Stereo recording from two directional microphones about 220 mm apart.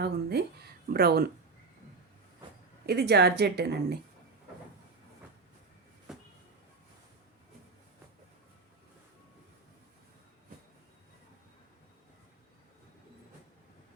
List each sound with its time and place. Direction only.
0.0 s speech: 45° right (ahead or behind)
2.8 s speech: 45° right (ahead or behind)
6.1 s a sound: 5° right (ahead or behind)